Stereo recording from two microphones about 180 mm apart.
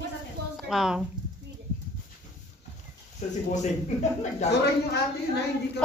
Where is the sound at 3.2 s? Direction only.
40° left (ahead or behind).